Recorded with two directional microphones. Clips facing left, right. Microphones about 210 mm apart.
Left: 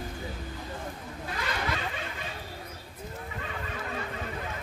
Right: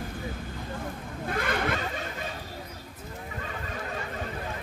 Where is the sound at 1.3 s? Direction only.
55° right (ahead or behind).